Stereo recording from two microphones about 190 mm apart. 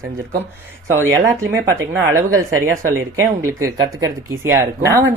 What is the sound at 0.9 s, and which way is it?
Speech, 15° right (ahead or behind).